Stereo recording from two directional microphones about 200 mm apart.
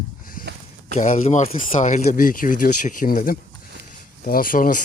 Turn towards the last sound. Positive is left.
turn(degrees=45)  # may be behind; listen again after turning